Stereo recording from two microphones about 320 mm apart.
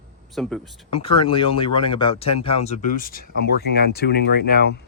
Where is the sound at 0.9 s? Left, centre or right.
Centre.